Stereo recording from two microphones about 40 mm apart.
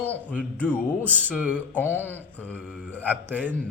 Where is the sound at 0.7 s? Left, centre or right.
Right.